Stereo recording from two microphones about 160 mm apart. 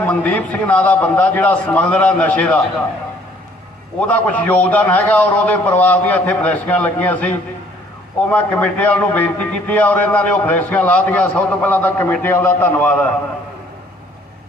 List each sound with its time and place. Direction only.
0.1 s a man's voice: 10° left (ahead or behind)
4.0 s a man's voice: 10° left (ahead or behind)